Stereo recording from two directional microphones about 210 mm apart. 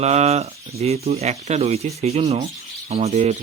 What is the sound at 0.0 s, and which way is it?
Speech, 30° right (ahead or behind).